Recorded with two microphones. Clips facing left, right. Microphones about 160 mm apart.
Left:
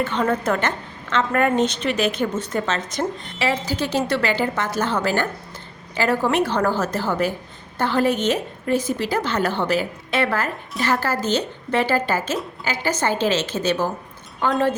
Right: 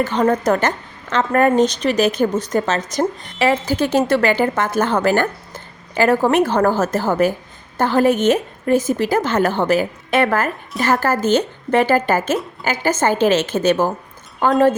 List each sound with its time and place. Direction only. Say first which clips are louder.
0.0 s a woman's voice: right 5 dB; 40° right (ahead or behind)